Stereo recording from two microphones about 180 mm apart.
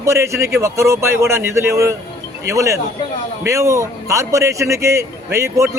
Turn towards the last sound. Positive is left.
turn(degrees=-15)  # may be behind; listen again after turning